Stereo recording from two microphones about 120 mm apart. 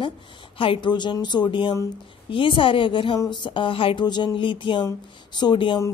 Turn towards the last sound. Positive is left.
turn(degrees=40)  # may be behind; listen again after turning